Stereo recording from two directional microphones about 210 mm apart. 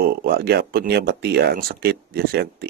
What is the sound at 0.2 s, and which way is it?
Speech, 50° right (ahead or behind).